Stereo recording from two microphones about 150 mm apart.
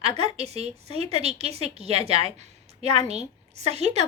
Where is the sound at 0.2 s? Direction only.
45° right (ahead or behind).